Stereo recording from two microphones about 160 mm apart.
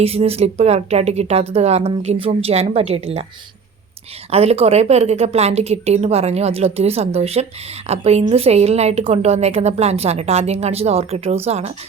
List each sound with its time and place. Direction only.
0.0 s a woman's voice: 40° right (ahead or behind)
4.3 s a woman's voice: 40° right (ahead or behind)